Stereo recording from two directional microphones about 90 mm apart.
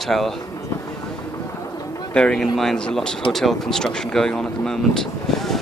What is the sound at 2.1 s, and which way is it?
Speech, 10° left (ahead or behind).